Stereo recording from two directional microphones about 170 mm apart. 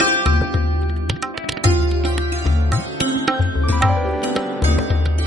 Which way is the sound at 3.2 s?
Centre (ahead or behind).